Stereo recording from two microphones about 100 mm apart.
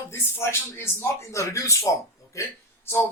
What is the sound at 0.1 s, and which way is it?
Speech, 25° left (ahead or behind).